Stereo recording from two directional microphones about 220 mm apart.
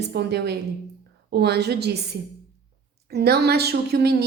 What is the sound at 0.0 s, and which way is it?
A woman's voice, 50° right (ahead or behind).